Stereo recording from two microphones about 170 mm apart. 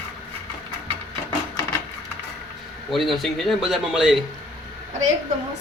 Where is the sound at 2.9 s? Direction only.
Centre (ahead or behind).